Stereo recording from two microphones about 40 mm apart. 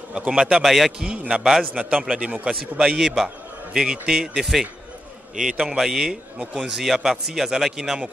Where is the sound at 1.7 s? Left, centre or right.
Right.